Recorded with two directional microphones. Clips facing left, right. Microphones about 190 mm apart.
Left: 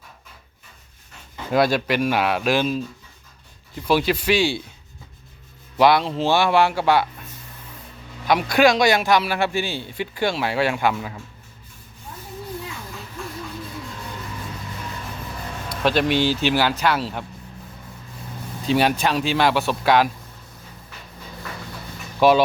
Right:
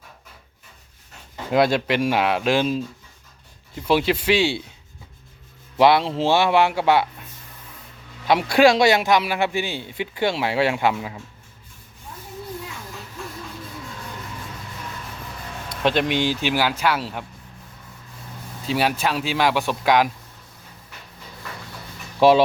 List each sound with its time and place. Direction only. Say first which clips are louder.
1.5 s a man's voice: even; 20° right (ahead or behind)
3.8 s a man's voice: even; 25° right (ahead or behind)
5.7 s a man's voice: right 1 dB; 25° right (ahead or behind)
8.3 s a man's voice: right 1 dB; 25° right (ahead or behind)
15.7 s speech: left 1 dB; 20° right (ahead or behind)
18.6 s speech: left 3 dB; 5° right (ahead or behind)
22.2 s a man's voice: right 1 dB; 30° right (ahead or behind)